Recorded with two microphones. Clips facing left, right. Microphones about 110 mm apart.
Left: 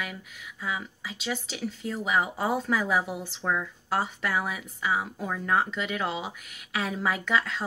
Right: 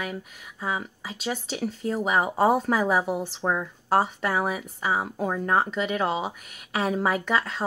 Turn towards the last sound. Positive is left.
turn(degrees=-40)  # may be behind; listen again after turning